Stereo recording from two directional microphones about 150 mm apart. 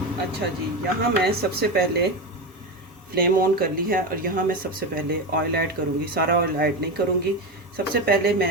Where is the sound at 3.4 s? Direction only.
75° right (ahead or behind); by 6.7 s 90° right.